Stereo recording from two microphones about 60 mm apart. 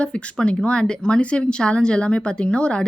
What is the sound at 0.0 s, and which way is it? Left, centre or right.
Speech, centre.